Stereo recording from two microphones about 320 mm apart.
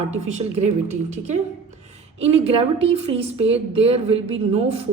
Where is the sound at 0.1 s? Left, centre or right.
Centre.